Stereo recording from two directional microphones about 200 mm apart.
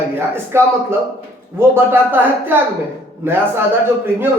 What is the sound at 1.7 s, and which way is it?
Speech, 10° right (ahead or behind).